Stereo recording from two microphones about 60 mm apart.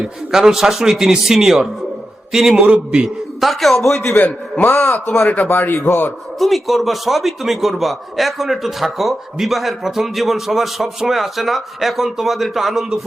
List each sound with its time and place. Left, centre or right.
0.0 s a man's voice: centre
2.6 s a man's voice: centre
3.4 s a man's voice: centre
4.1 s a man's voice: left
6.4 s a man's voice: centre